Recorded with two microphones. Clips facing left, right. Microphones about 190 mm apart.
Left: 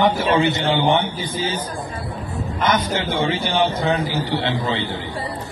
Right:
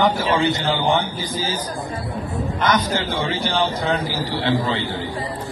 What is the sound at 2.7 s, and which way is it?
A man's voice, 25° left (ahead or behind).